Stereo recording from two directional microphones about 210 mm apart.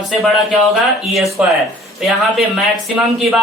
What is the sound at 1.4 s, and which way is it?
Speech, 5° right (ahead or behind).